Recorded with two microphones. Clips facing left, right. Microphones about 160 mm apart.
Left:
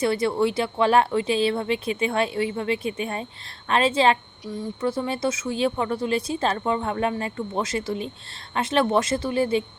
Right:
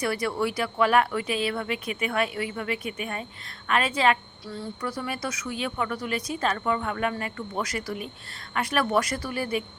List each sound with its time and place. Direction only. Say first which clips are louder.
0.0 s speech: left 5 dB; 25° left (ahead or behind)
4.4 s speech: left 6 dB; 15° left (ahead or behind)